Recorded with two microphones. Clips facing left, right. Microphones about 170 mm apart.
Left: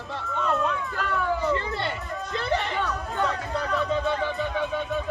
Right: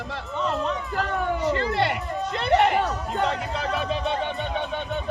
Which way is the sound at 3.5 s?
85° right.